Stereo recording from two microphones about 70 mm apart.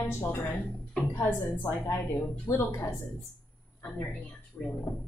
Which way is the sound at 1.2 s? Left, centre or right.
Left.